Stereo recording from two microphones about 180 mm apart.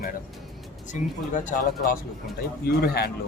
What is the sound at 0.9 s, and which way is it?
Speech, 45° left (ahead or behind).